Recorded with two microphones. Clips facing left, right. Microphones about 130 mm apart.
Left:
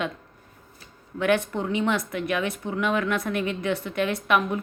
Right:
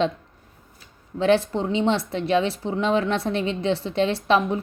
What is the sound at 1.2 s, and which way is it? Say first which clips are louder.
A woman's voice: right 4 dB; 30° right (ahead or behind).